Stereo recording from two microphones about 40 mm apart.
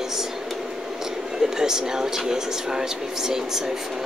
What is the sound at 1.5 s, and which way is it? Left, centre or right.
Speech, centre.